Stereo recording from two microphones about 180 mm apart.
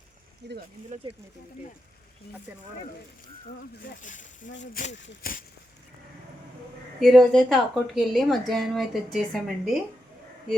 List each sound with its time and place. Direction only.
0.4 s speech: 70° right (ahead or behind)
3.8 s speech: 45° left (ahead or behind)
7.0 s a woman's voice: centre (ahead or behind)